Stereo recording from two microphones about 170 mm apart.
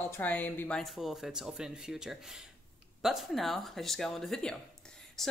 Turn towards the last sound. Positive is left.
turn(degrees=5)  # may be behind; listen again after turning